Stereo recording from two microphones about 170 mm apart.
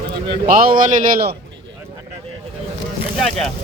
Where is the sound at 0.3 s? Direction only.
55° right (ahead or behind).